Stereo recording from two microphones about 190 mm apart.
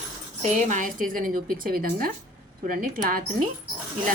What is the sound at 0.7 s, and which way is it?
A woman's voice, 45° right (ahead or behind).